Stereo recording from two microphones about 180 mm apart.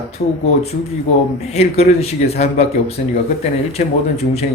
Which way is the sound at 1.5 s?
35° left (ahead or behind).